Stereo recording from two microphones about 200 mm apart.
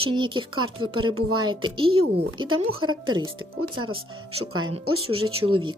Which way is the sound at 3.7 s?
90° right.